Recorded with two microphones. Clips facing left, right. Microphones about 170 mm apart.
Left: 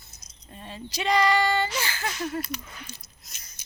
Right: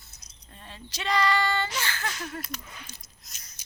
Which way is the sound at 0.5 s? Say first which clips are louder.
Left 7 dB; 15° left (ahead or behind).